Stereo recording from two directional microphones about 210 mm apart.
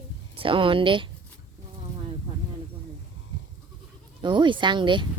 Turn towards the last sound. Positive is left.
turn(degrees=-20)  # may be behind; listen again after turning